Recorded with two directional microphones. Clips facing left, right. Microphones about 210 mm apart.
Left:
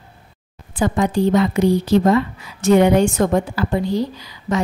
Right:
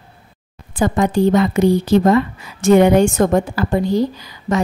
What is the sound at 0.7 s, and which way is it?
A woman's voice, 45° right (ahead or behind).